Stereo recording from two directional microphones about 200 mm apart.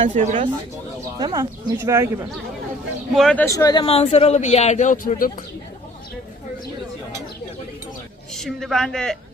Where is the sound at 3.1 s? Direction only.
5° left (ahead or behind); by 5.4 s 45° left (ahead or behind).